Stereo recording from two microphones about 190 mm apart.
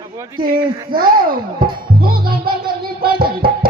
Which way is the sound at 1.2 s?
50° right (ahead or behind).